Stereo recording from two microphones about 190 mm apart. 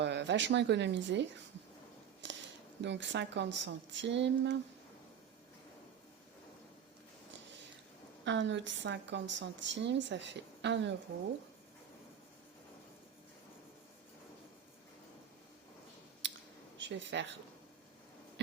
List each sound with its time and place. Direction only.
0.0 s a woman's voice: 65° right (ahead or behind)
2.2 s a sound: 70° right (ahead or behind)
2.8 s a woman's voice: 70° right (ahead or behind)
8.2 s a woman's voice: 70° right (ahead or behind)
16.2 s clicking: 70° right (ahead or behind)
16.7 s speech: 70° right (ahead or behind)